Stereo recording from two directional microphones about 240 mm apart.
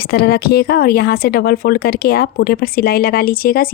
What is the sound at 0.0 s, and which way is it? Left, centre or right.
Speech, left.